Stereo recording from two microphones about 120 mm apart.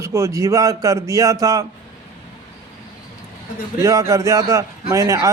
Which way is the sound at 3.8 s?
25° right (ahead or behind).